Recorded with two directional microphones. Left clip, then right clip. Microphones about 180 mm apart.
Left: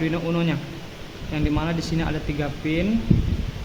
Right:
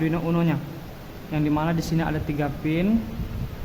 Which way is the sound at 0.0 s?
30° right (ahead or behind).